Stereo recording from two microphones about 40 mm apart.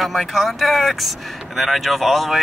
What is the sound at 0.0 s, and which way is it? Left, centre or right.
Speech, centre.